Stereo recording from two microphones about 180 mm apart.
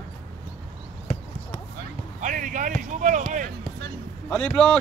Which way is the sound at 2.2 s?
45° right (ahead or behind).